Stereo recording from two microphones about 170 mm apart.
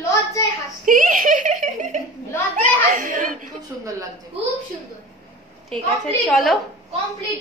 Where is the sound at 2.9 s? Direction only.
50° right (ahead or behind).